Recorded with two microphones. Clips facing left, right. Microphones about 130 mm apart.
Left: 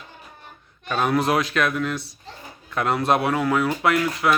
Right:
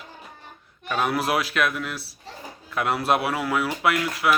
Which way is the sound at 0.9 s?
5° right (ahead or behind).